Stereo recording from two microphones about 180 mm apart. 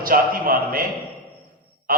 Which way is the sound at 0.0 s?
50° right (ahead or behind).